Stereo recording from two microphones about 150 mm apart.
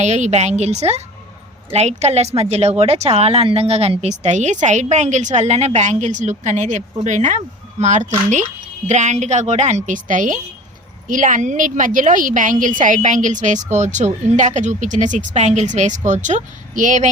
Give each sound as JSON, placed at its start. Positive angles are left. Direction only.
{"t": 0.0, "sound": "a woman's voice", "side_deg": -50}